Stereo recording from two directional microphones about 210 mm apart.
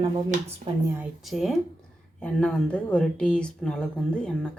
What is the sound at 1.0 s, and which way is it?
Speech, centre (ahead or behind).